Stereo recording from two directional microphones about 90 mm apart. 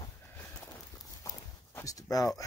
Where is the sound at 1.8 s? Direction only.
40° left (ahead or behind).